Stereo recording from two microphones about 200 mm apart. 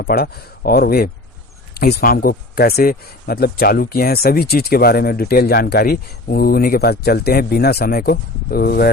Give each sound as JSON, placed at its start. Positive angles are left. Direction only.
{"t": 0.0, "sound": "speech", "side_deg": 50}